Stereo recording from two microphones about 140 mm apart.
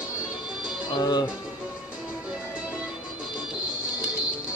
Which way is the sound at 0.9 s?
30° left (ahead or behind).